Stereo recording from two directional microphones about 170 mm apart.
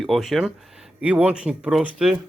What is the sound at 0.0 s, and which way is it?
Speech, centre (ahead or behind).